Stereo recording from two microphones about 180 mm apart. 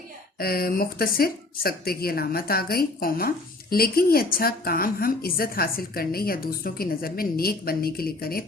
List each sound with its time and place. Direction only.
0.3 s a woman's voice: 55° left (ahead or behind)